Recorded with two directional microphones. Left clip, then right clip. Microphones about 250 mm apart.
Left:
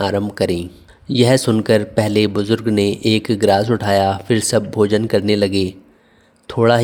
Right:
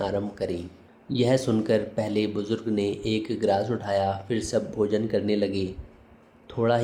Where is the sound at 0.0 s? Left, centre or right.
Left.